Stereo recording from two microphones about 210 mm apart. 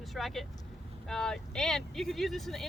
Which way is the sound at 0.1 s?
Centre (ahead or behind).